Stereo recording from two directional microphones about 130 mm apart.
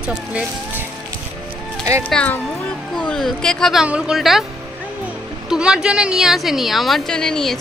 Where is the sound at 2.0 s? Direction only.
10° left (ahead or behind).